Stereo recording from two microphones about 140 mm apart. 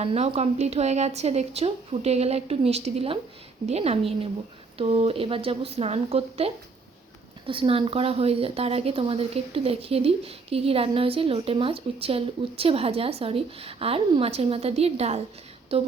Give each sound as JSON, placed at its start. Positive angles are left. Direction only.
{"t": 0.0, "sound": "a woman's voice", "side_deg": -45}